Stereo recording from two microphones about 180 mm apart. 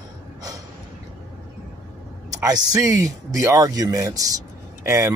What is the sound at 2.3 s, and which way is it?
Speech, 20° right (ahead or behind).